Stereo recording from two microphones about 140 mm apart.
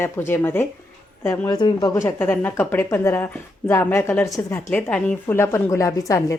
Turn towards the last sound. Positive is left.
turn(degrees=20)  # may be behind; listen again after turning